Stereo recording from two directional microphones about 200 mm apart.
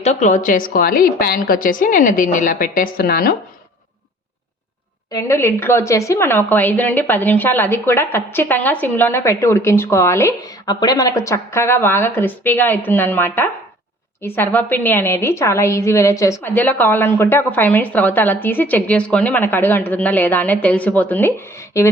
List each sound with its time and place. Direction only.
0.0 s a woman's voice: 35° left (ahead or behind)
5.1 s speech: 15° left (ahead or behind)